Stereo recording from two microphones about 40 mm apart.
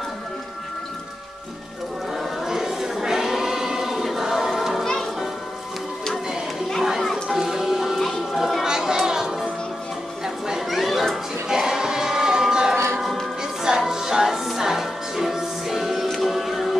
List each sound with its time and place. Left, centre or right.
2.4 s choir: centre
6.8 s music: centre
7.2 s music: centre
8.4 s a sound: centre
8.6 s children playing: centre
10.2 s a sound: centre
11.4 s choir: centre
13.4 s music: centre